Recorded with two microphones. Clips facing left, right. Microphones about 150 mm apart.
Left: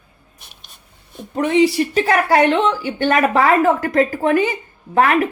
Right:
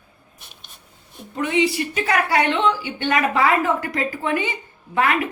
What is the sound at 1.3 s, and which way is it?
A woman's voice, 40° left (ahead or behind).